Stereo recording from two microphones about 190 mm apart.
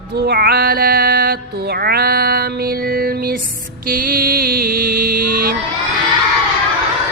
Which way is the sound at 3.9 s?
50° right (ahead or behind).